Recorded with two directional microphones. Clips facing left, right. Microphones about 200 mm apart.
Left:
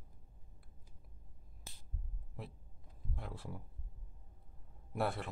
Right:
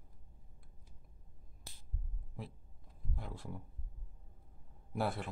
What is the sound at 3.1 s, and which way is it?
Speech, centre (ahead or behind).